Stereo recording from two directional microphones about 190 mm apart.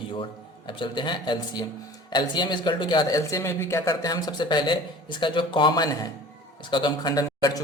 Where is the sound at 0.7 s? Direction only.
25° left (ahead or behind).